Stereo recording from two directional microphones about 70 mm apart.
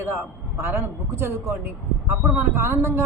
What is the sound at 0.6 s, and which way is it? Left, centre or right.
Speech, right.